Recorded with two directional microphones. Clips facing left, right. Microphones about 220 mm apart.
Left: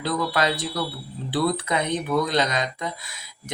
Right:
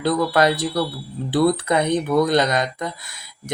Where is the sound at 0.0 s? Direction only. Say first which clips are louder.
Right 6 dB; 45° right (ahead or behind).